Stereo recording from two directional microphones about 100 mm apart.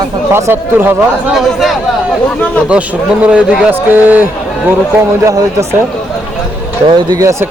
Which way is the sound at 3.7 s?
20° right (ahead or behind).